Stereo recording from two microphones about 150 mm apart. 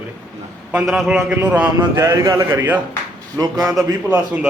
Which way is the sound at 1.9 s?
20° right (ahead or behind).